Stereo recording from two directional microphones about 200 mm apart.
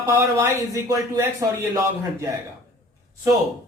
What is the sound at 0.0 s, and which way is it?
A man's voice, 15° right (ahead or behind).